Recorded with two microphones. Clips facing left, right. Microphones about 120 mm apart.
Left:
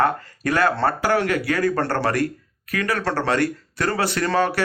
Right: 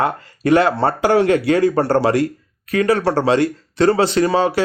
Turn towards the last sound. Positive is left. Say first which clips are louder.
# right 5 dB
turn(degrees=-15)  # may be behind; listen again after turning